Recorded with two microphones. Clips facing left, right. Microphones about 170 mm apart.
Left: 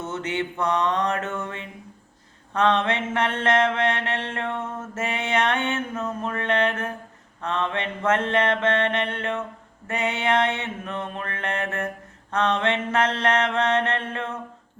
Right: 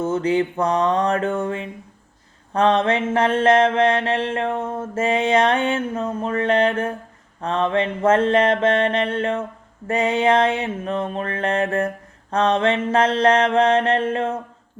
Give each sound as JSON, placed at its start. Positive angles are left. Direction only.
{"t": 0.0, "sound": "mantra", "side_deg": -30}